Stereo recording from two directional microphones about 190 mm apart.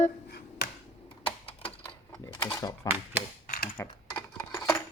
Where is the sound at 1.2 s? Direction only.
30° left (ahead or behind).